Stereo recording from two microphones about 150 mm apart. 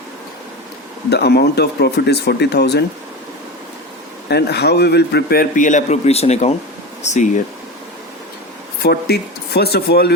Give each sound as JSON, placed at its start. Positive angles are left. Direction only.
{"t": 1.1, "sound": "a man's voice", "side_deg": 90}
{"t": 4.3, "sound": "a man's voice", "side_deg": 90}
{"t": 8.8, "sound": "a man's voice", "side_deg": 90}